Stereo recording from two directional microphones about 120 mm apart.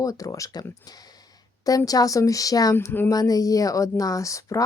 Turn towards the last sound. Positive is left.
turn(degrees=25)  # may be behind; listen again after turning